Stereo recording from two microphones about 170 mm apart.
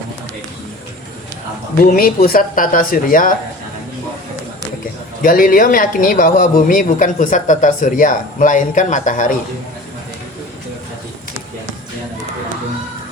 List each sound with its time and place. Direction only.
1.8 s speech: 60° left (ahead or behind)
5.2 s speech: 55° left (ahead or behind)